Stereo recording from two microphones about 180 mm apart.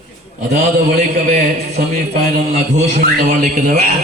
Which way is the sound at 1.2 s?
45° right (ahead or behind).